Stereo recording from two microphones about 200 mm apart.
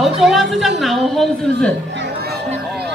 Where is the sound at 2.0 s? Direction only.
50° right (ahead or behind).